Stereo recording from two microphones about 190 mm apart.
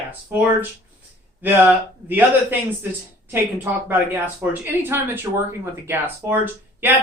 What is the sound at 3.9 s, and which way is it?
Speech, 10° right (ahead or behind).